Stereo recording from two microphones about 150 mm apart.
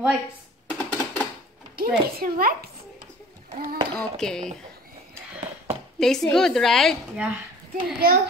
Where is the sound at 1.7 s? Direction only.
85° right.